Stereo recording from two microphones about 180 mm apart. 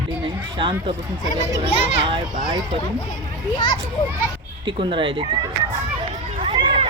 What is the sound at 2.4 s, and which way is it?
Speech, 20° right (ahead or behind).